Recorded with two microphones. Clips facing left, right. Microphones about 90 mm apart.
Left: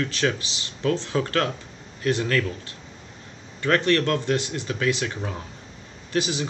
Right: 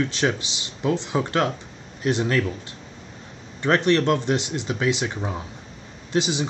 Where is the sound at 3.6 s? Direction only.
20° right (ahead or behind).